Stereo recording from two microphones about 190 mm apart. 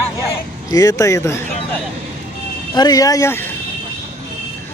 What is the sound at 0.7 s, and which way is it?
Speech, 20° left (ahead or behind).